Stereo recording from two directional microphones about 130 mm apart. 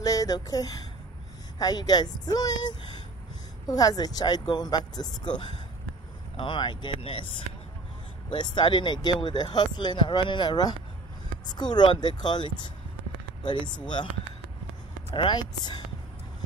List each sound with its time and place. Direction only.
0.0 s speech: 30° left (ahead or behind)
8.3 s speech: 35° left (ahead or behind)
15.1 s speech: 35° left (ahead or behind)